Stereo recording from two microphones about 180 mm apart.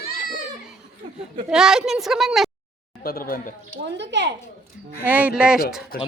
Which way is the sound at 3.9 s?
75° right (ahead or behind).